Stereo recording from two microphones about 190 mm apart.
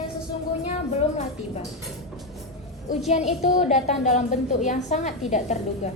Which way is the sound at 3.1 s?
35° left (ahead or behind).